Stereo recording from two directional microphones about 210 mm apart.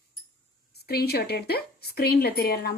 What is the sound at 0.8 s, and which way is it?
Speech, 50° left (ahead or behind).